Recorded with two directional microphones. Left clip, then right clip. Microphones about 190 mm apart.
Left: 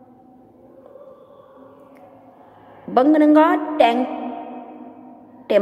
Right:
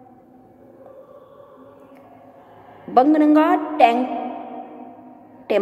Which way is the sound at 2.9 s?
15° left (ahead or behind).